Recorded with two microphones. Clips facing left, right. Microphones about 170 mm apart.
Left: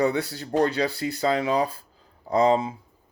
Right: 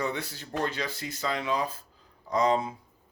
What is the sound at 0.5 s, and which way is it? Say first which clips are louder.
Speech: left 9 dB; 35° left (ahead or behind).